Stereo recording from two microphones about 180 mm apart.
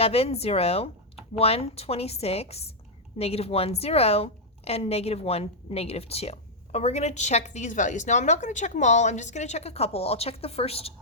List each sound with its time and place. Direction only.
0.0 s a woman's voice: 35° left (ahead or behind)